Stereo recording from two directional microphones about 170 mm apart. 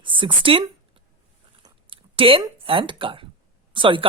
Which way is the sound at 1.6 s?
30° right (ahead or behind).